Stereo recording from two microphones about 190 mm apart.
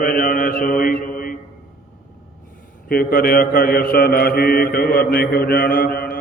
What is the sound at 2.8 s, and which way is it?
Mantra, 50° left (ahead or behind).